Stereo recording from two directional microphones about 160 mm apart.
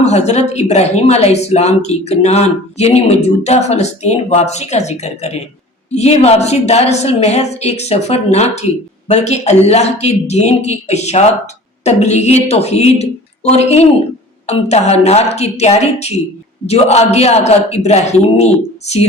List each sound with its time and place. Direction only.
0.0 s speech: 45° left (ahead or behind)